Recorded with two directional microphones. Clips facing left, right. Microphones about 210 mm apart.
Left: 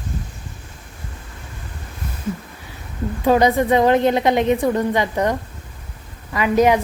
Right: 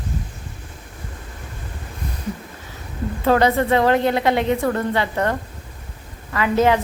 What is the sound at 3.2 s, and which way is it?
A woman's voice, 15° left (ahead or behind).